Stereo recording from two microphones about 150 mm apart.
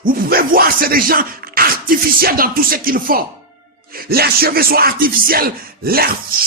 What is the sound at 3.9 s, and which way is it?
Speech, 90° right.